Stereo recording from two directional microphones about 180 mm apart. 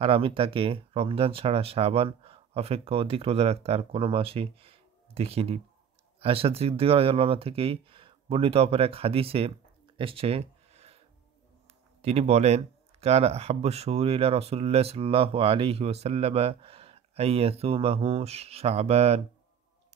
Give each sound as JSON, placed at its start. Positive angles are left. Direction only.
{"t": 0.0, "sound": "speech", "side_deg": -30}
{"t": 9.9, "sound": "a sound", "side_deg": -30}
{"t": 12.0, "sound": "speech", "side_deg": -35}